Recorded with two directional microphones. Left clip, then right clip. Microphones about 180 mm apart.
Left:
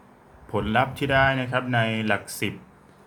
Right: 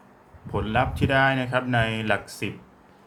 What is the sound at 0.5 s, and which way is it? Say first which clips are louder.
Speech: left 1 dB; 10° left (ahead or behind).